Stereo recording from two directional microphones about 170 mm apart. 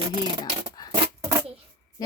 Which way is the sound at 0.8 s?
20° left (ahead or behind).